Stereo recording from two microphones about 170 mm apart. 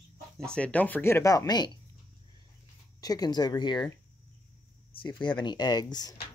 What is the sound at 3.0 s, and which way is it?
Speech, 20° left (ahead or behind).